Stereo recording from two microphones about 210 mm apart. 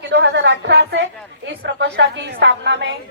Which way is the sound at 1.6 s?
55° right (ahead or behind).